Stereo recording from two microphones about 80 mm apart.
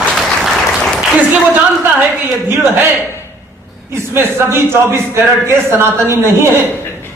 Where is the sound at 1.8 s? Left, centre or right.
Right.